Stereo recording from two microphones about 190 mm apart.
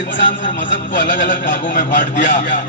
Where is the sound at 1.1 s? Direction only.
45° left (ahead or behind).